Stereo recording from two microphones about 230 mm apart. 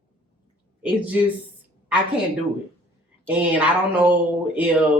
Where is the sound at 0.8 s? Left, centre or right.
Centre.